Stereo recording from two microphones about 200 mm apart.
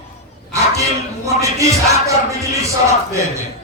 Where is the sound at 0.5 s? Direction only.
15° right (ahead or behind).